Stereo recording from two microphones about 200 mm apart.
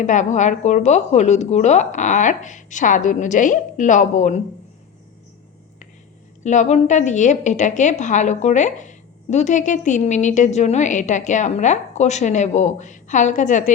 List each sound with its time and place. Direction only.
0.0 s a woman's voice: 40° left (ahead or behind)
6.4 s a woman's voice: 35° left (ahead or behind)